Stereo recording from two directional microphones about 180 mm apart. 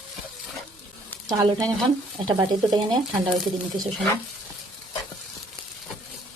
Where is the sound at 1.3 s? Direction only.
20° right (ahead or behind).